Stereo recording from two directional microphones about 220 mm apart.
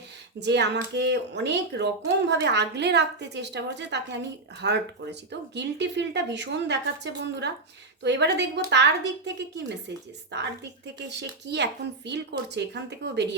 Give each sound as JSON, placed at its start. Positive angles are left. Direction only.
{"t": 0.3, "sound": "a woman's voice", "side_deg": -50}
{"t": 11.2, "sound": "a woman's voice", "side_deg": -50}